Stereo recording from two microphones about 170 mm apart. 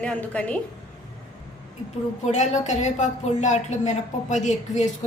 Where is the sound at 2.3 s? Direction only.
45° left (ahead or behind).